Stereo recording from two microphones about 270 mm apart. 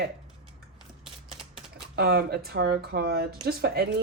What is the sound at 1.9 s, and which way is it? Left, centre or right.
Speech, right.